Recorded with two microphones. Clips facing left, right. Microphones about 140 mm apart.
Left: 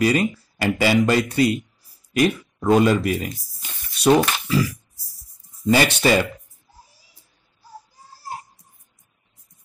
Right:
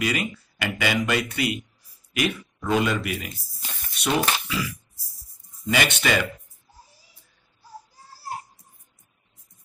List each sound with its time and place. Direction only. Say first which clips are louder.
0.0 s speech: left 7 dB; 35° left (ahead or behind)